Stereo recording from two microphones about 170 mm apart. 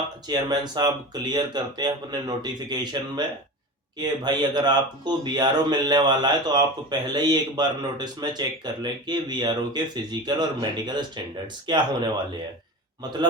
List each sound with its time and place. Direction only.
0.3 s speech: 25° right (ahead or behind)